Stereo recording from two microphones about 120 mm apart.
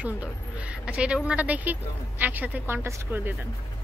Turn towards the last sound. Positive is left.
turn(degrees=-20)  # may be behind; listen again after turning